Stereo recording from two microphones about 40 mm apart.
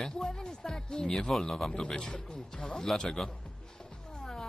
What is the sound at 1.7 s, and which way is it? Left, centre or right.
Speech, left.